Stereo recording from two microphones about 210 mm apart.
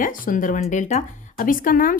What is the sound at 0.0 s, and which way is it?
Speech, 40° left (ahead or behind).